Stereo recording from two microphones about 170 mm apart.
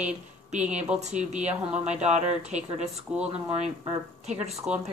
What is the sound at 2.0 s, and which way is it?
Speech, 40° right (ahead or behind).